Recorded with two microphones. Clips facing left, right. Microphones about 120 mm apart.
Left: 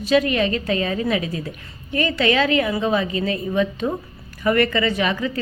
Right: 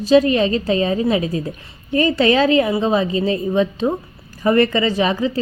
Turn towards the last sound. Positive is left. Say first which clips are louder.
# right 4 dB
turn(degrees=-30)  # may be behind; listen again after turning